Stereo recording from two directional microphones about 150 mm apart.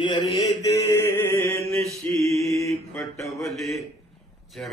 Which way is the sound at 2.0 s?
20° left (ahead or behind).